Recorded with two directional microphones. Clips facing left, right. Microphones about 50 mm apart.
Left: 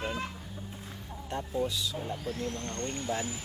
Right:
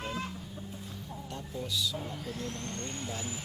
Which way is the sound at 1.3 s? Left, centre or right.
Left.